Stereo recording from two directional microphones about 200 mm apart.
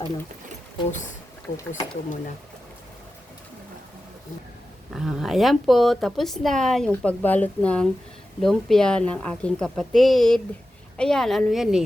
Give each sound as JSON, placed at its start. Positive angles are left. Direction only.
{"t": 1.5, "sound": "speech", "side_deg": 35}
{"t": 4.9, "sound": "speech", "side_deg": 0}